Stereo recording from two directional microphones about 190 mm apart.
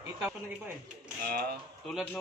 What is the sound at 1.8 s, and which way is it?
Speech, 5° left (ahead or behind).